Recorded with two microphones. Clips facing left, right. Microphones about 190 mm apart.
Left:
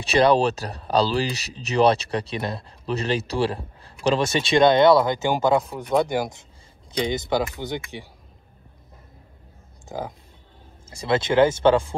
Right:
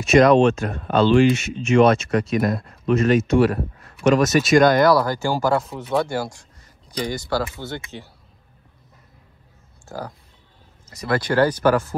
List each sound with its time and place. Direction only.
0.0 s speech: 35° left (ahead or behind); by 8.1 s 15° left (ahead or behind)
9.8 s speech: 20° left (ahead or behind)